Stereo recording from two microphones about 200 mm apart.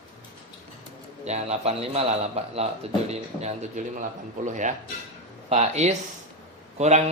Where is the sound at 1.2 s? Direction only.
35° right (ahead or behind).